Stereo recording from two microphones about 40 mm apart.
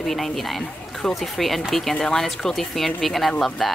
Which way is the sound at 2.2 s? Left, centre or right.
Centre.